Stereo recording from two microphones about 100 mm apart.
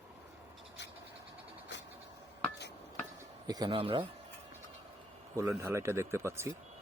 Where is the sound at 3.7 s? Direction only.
65° right (ahead or behind).